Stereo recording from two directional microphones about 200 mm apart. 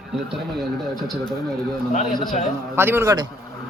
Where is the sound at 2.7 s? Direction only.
10° right (ahead or behind).